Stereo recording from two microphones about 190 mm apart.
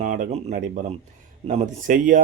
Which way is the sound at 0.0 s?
40° right (ahead or behind).